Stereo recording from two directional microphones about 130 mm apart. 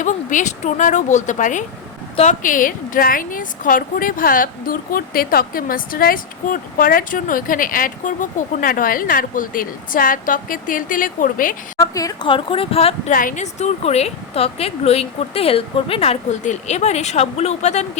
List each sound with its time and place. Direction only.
0.0 s a woman's voice: 75° left (ahead or behind); by 11.5 s 90° left
11.8 s a woman's voice: 30° left (ahead or behind)
12.3 s speech: 45° left (ahead or behind)
13.1 s a woman's voice: 85° left; by 17.8 s 60° left (ahead or behind)